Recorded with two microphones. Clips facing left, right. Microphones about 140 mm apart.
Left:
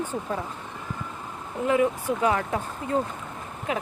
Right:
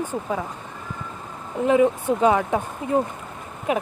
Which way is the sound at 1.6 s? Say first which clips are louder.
Right 5 dB; 25° right (ahead or behind).